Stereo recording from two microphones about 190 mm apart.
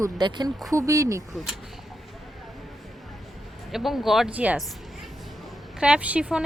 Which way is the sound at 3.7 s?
Centre (ahead or behind).